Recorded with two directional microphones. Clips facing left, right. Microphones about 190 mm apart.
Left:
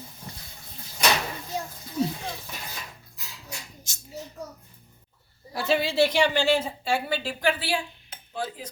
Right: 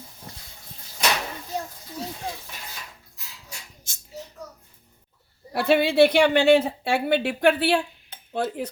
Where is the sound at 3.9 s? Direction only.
55° right (ahead or behind).